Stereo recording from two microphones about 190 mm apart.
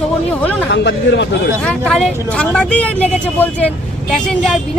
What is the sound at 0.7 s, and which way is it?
Speech, 65° left (ahead or behind).